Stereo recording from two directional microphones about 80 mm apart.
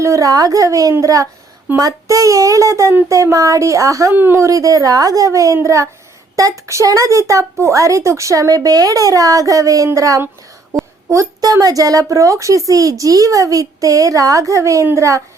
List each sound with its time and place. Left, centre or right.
0.0 s a woman's voice: right
4.1 s speech: right
4.4 s a woman's voice: right
5.6 s child singing: right
6.3 s a woman's voice: right